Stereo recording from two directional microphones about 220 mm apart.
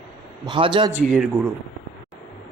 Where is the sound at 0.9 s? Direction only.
5° right (ahead or behind).